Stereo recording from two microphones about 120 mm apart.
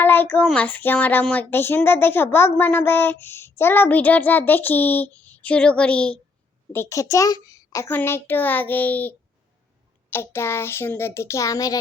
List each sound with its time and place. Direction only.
0.0 s a child's voice: 15° left (ahead or behind)
6.7 s a child's voice: 25° left (ahead or behind)